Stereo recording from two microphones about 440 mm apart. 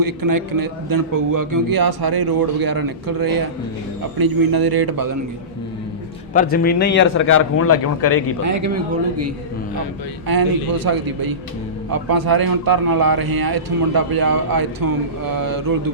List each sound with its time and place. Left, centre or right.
0.0 s a man's voice: right
6.3 s a man's voice: centre
8.0 s a man's voice: left
8.4 s speech: right
10.2 s a man's voice: right